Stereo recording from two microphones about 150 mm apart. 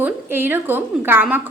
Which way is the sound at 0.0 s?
15° right (ahead or behind).